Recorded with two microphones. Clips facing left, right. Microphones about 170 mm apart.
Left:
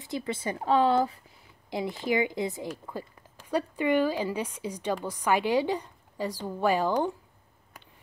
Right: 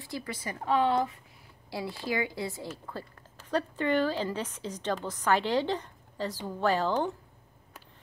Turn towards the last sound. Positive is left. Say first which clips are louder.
# left 2 dB
turn(degrees=10)  # may be behind; listen again after turning